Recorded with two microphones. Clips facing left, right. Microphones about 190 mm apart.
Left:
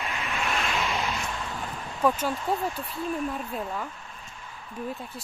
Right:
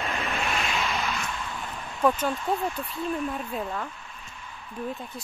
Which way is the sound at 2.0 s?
5° left (ahead or behind).